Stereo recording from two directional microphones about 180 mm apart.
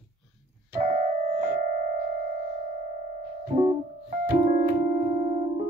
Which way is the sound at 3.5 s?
35° right (ahead or behind).